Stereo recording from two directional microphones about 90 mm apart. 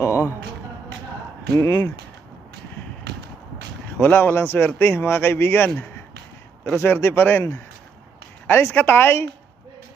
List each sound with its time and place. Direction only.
0.0 s music: 30° left (ahead or behind)
1.6 s speech: 50° left (ahead or behind)
4.0 s speech: 25° left (ahead or behind)
6.8 s speech: 25° left (ahead or behind)